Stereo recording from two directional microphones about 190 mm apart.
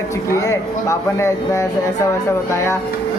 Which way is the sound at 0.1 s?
15° left (ahead or behind).